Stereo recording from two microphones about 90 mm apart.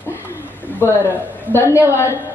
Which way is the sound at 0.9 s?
20° right (ahead or behind).